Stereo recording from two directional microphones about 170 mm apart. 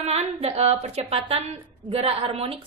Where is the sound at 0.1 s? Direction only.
40° right (ahead or behind).